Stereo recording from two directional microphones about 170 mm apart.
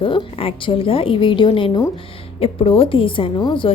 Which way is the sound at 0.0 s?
30° left (ahead or behind).